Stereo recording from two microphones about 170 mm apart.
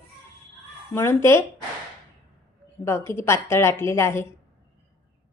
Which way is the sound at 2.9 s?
15° left (ahead or behind).